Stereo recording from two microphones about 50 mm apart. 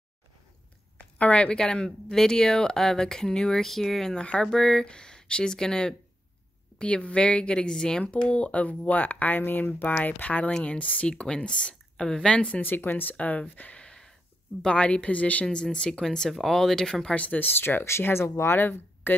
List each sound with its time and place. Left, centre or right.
0.9 s a woman's voice: left; by 4.1 s centre
4.1 s speech: centre
8.0 s speech: left
12.6 s speech: left
13.1 s speech: left
15.4 s speech: centre
16.3 s speech: centre
17.1 s speech: left
17.4 s speech: left
18.6 s speech: left